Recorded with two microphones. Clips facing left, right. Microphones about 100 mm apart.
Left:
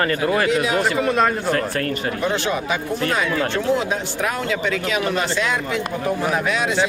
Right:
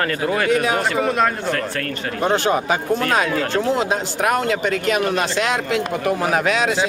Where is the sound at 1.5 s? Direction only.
15° left (ahead or behind).